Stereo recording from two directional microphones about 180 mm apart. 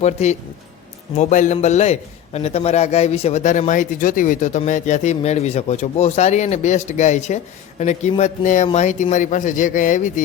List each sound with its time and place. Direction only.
0.0 s a man's voice: 40° left (ahead or behind)